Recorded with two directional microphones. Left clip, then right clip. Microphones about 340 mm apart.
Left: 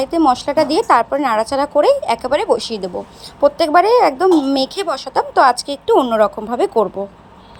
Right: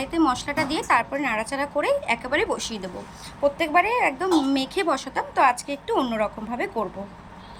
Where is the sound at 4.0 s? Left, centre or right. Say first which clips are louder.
Left 9 dB; left.